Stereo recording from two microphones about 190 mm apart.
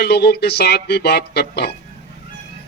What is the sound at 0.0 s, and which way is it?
Speech, 60° left (ahead or behind).